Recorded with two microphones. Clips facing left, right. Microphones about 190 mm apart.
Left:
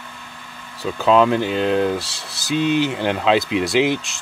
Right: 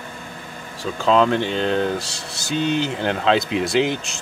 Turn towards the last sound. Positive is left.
turn(degrees=0)  # may be behind; listen again after turning